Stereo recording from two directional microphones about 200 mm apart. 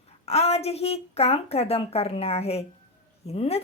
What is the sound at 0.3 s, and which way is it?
A woman's voice, 30° left (ahead or behind).